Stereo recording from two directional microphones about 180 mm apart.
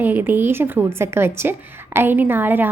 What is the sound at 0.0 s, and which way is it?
A woman's voice, 10° right (ahead or behind).